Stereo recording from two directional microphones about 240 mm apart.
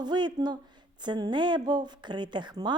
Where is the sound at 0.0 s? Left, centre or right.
Centre.